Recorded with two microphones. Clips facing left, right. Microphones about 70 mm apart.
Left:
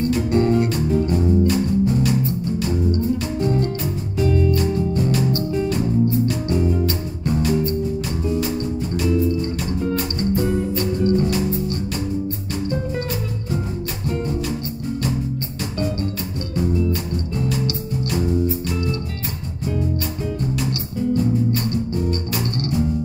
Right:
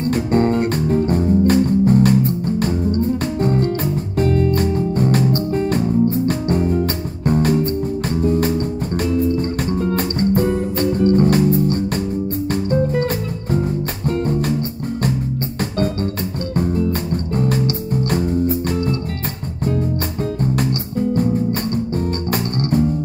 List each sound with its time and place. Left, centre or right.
0.0 s music: right
16.5 s music: right
21.1 s music: right